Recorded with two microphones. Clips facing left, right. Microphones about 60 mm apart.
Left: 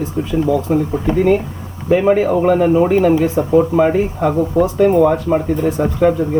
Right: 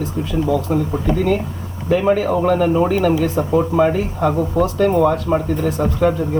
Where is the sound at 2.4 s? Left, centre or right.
Left; by 5.4 s centre.